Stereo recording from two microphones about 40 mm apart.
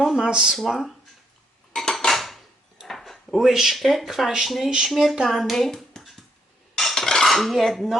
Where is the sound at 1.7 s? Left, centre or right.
Centre.